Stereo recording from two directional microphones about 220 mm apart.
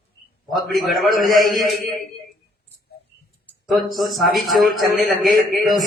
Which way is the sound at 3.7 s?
Centre (ahead or behind).